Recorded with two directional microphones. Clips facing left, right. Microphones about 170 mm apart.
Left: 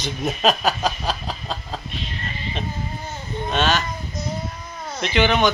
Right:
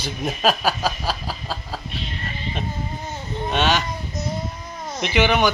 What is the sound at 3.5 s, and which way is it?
Speech, 15° right (ahead or behind).